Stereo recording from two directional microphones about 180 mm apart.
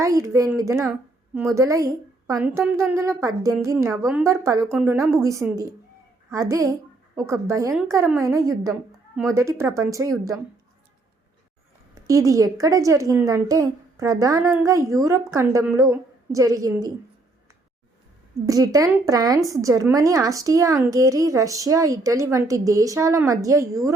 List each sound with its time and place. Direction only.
0.0 s a woman's voice: 20° right (ahead or behind)
12.0 s a woman's voice: 20° right (ahead or behind)
18.4 s speech: 20° right (ahead or behind)